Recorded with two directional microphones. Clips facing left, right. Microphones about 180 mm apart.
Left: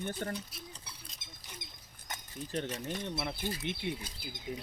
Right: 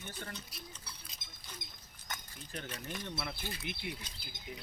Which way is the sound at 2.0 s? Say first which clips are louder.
Left 5 dB; 30° left (ahead or behind).